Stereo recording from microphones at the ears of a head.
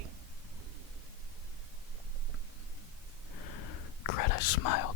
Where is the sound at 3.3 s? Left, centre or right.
Left.